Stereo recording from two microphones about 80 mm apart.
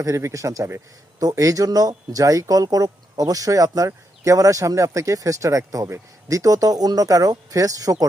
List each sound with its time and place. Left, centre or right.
0.0 s speech: right